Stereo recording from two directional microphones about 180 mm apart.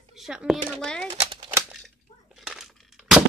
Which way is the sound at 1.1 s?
30° right (ahead or behind).